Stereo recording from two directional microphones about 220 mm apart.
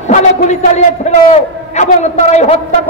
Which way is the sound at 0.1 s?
30° left (ahead or behind).